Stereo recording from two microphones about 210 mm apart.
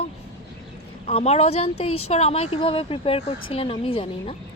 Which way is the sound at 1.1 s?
30° left (ahead or behind).